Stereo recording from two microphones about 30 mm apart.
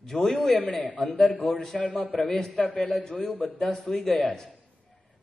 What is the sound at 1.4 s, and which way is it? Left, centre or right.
Speech, centre.